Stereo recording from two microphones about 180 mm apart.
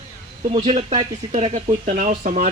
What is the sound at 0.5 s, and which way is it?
Speech, 40° right (ahead or behind).